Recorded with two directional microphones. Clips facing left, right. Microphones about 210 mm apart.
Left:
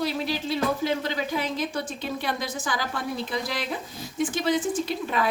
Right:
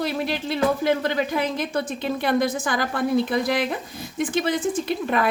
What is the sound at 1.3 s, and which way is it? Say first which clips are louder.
A woman's voice: right 4 dB; 55° right (ahead or behind).